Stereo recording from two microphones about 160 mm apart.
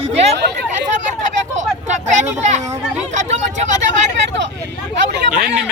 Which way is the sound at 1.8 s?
45° right (ahead or behind).